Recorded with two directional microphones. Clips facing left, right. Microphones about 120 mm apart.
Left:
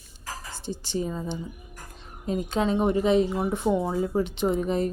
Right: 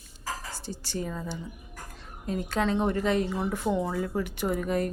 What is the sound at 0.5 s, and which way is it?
A woman's voice, 20° left (ahead or behind).